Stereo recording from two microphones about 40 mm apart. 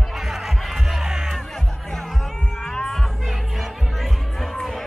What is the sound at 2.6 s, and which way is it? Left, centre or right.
Music, centre.